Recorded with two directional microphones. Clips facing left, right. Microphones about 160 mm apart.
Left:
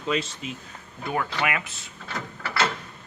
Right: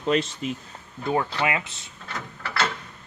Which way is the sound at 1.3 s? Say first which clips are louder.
Right 2 dB; 25° right (ahead or behind).